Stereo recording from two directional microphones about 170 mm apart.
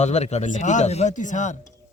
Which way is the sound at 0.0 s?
40° left (ahead or behind).